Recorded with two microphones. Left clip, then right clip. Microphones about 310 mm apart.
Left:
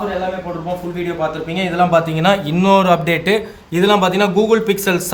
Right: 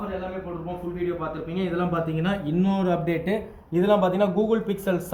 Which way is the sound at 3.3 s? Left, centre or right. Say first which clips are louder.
Left 10 dB; left.